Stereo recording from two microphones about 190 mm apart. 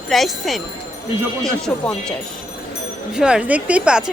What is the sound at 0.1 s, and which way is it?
Speech, centre (ahead or behind).